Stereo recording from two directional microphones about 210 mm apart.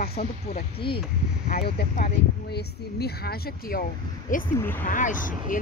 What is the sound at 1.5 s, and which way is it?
Speech, 40° left (ahead or behind).